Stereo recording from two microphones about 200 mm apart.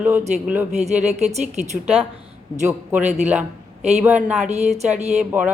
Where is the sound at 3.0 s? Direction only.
35° right (ahead or behind).